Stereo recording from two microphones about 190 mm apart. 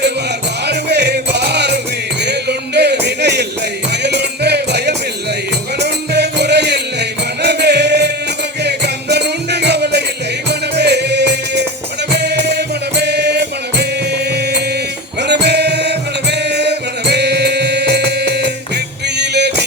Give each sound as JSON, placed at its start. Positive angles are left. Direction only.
{"t": 0.6, "sound": "music", "side_deg": -60}